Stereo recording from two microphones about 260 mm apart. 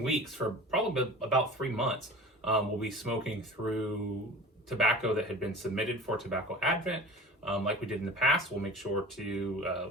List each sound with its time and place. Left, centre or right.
0.0 s speech: centre